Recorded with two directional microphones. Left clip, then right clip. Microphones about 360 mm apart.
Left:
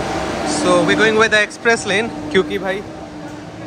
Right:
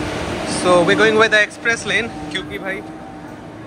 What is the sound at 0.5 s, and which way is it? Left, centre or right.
Speech, centre.